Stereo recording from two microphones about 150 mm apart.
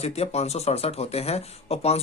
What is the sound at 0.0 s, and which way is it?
Speech, 45° left (ahead or behind).